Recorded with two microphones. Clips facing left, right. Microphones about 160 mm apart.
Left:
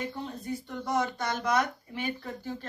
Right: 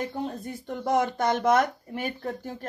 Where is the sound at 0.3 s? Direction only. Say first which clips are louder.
Right 2 dB; 50° right (ahead or behind).